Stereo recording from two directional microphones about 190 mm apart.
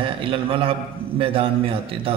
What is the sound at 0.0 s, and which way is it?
A man's voice, 25° right (ahead or behind).